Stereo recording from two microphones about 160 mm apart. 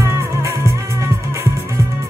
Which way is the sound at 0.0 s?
20° right (ahead or behind).